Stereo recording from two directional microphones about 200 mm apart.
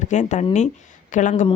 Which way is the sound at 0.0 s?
35° left (ahead or behind).